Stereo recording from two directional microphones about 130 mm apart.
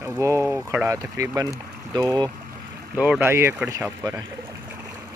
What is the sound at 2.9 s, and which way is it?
Speech, 10° right (ahead or behind).